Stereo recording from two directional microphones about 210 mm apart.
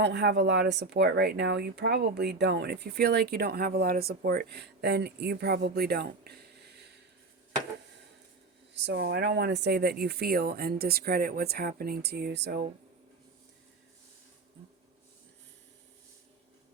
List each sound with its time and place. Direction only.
0.0 s speech: 55° right (ahead or behind)
8.9 s speech: 50° right (ahead or behind)